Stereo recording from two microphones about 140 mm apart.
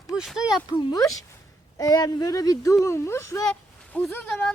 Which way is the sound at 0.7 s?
30° left (ahead or behind).